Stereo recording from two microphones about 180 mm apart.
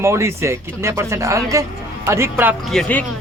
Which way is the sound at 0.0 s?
15° right (ahead or behind).